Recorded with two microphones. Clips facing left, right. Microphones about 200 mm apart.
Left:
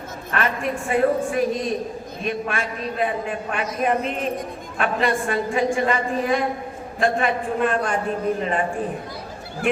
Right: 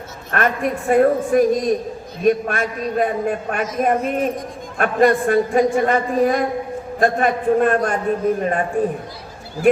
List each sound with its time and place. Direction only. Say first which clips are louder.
0.3 s a man's voice: right 4 dB; 50° right (ahead or behind)